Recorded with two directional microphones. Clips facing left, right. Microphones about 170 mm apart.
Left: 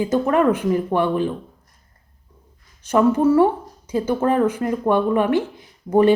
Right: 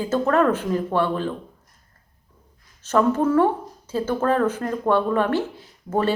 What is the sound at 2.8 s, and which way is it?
Speech, 15° left (ahead or behind).